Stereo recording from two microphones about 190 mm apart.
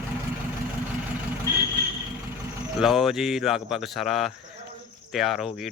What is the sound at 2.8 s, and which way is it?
Speech, centre (ahead or behind).